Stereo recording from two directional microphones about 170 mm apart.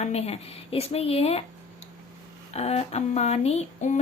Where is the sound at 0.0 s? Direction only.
40° left (ahead or behind).